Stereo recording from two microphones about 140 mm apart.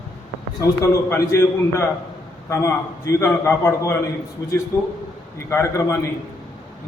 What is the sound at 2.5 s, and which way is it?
A man's voice, 20° left (ahead or behind).